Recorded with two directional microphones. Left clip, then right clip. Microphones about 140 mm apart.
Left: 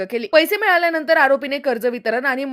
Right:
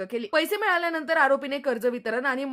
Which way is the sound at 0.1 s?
25° left (ahead or behind).